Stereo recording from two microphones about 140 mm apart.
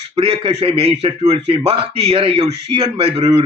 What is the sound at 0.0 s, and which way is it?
A man's voice, 40° right (ahead or behind).